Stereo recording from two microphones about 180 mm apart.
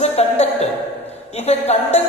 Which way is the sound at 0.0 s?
35° left (ahead or behind).